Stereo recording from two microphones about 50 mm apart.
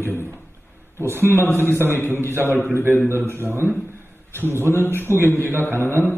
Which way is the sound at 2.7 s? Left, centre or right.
Right.